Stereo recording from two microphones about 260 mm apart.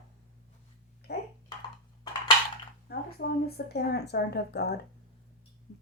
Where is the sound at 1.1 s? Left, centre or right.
Left.